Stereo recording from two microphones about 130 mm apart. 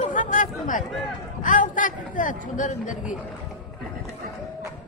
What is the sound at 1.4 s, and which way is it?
A man's voice, 90° left.